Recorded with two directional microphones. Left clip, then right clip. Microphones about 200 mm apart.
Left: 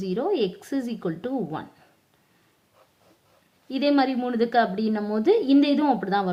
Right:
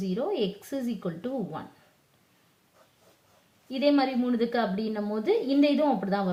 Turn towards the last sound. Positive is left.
turn(degrees=45)  # may be behind; listen again after turning